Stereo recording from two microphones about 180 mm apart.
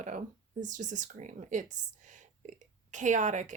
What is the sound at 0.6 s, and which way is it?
Speech, 45° right (ahead or behind).